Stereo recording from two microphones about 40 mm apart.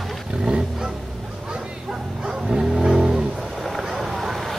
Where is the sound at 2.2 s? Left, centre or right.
Centre.